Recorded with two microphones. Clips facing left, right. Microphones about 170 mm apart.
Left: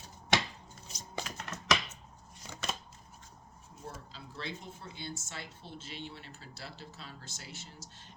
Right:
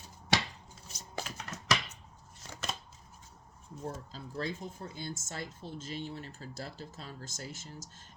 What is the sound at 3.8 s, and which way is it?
Speech, 45° right (ahead or behind).